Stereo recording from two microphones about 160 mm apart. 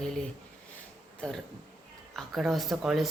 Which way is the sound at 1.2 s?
5° left (ahead or behind).